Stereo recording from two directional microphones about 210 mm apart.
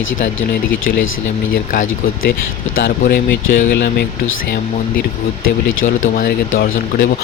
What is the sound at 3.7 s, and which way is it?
Speech, 50° left (ahead or behind).